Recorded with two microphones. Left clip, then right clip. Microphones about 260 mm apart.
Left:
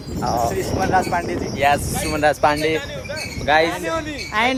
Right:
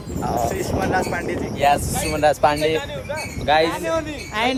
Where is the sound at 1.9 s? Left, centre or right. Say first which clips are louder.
Even; right.